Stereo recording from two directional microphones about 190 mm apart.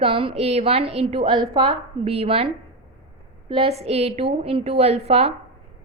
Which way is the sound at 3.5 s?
30° right (ahead or behind).